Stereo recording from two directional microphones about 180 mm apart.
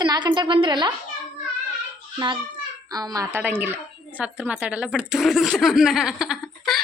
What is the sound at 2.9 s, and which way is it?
A woman's voice, 20° right (ahead or behind).